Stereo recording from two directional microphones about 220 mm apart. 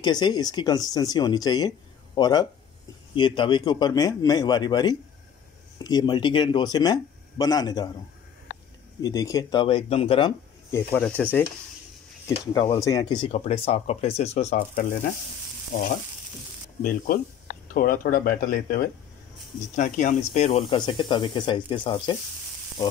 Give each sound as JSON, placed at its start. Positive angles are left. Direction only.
{"t": 0.0, "sound": "speech", "side_deg": 20}
{"t": 9.0, "sound": "speech", "side_deg": 15}
{"t": 10.9, "sound": "speech", "side_deg": 5}
{"t": 12.4, "sound": "speech", "side_deg": 20}
{"t": 15.7, "sound": "frying", "side_deg": 35}
{"t": 16.8, "sound": "speech", "side_deg": 40}